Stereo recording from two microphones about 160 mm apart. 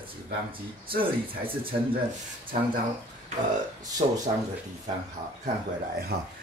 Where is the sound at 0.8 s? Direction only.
65° right (ahead or behind).